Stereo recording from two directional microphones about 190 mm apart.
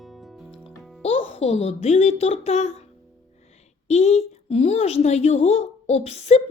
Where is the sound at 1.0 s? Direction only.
30° left (ahead or behind).